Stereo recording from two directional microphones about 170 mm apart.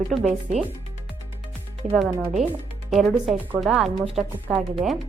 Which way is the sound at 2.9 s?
Centre (ahead or behind).